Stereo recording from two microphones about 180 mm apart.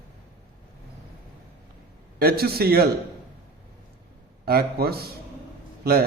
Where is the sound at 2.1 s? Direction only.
60° right (ahead or behind).